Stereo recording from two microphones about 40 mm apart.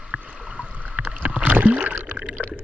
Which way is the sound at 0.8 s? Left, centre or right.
Right.